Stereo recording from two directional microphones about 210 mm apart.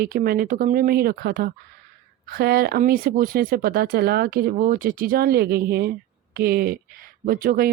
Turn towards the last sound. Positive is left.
turn(degrees=-45)  # may be behind; listen again after turning